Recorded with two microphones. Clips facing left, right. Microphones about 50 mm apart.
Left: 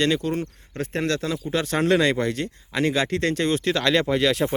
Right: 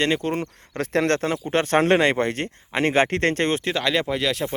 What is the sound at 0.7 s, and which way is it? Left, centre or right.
Speech, right.